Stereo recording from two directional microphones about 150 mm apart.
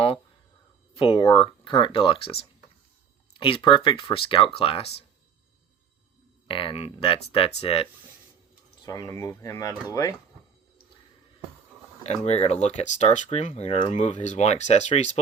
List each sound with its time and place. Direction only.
0.9 s speech: 35° left (ahead or behind)
6.5 s speech: 35° left (ahead or behind)
8.8 s speech: 25° left (ahead or behind)
12.0 s speech: 45° left (ahead or behind)